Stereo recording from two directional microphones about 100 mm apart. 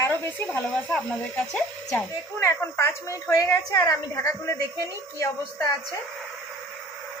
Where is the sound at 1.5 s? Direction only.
10° left (ahead or behind).